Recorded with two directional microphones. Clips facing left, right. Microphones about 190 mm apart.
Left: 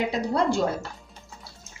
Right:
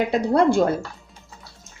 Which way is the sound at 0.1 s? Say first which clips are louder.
Right 6 dB; 55° right (ahead or behind).